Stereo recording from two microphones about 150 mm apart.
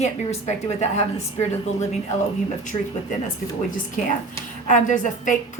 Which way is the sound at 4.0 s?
60° left (ahead or behind).